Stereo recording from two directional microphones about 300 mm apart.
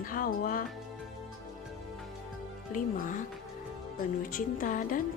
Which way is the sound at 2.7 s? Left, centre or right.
Left.